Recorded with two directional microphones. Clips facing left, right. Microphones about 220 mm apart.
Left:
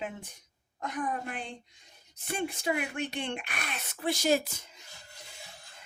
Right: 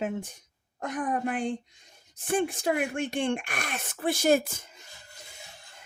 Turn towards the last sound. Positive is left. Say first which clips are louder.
# right 4 dB
turn(degrees=-50)  # may be behind; listen again after turning